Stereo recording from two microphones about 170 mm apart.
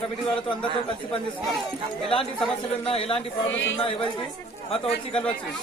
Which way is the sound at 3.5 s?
90° left.